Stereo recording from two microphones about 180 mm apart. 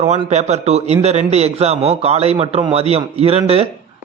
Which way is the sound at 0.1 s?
40° right (ahead or behind).